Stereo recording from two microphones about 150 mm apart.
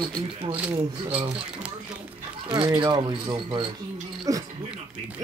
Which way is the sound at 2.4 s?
30° right (ahead or behind).